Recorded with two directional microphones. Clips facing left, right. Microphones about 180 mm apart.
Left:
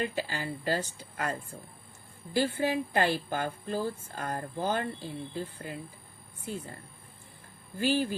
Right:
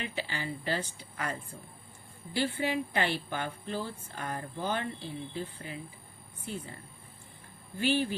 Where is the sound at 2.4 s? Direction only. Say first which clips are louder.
Left 2 dB; 45° left (ahead or behind).